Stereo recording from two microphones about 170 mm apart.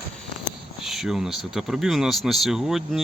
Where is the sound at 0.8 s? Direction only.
Centre (ahead or behind).